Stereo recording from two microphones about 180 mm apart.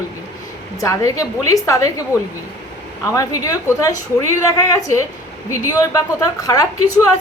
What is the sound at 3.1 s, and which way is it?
A woman's voice, 20° left (ahead or behind).